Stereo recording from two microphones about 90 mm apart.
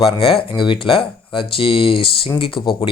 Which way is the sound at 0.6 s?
80° left.